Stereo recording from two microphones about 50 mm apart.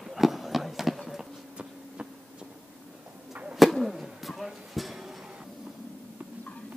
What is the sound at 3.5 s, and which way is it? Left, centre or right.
Bird, centre.